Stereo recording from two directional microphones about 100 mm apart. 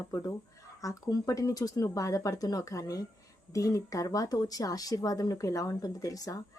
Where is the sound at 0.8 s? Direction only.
35° left (ahead or behind).